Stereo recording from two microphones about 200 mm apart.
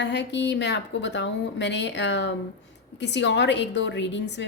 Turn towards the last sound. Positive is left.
turn(degrees=60)  # may be behind; listen again after turning